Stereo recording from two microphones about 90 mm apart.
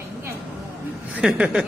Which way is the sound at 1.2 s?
10° right (ahead or behind).